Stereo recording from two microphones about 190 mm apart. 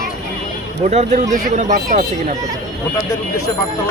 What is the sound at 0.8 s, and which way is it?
Speech, 35° right (ahead or behind).